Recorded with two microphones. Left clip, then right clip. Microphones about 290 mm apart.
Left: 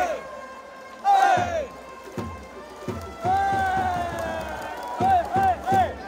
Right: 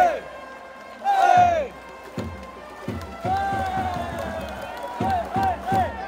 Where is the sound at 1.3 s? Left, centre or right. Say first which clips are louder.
Right 6 dB; centre.